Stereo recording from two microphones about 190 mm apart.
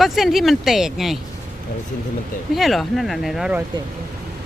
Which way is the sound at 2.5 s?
Centre (ahead or behind).